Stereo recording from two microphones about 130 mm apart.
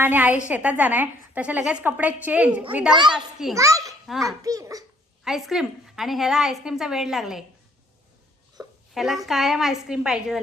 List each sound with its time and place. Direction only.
0.0 s a woman's voice: 15° right (ahead or behind)
3.5 s a child's voice: 25° right (ahead or behind)
5.2 s a woman's voice: 5° right (ahead or behind)
8.6 s a sound: 25° right (ahead or behind)
9.0 s a woman's voice: centre (ahead or behind)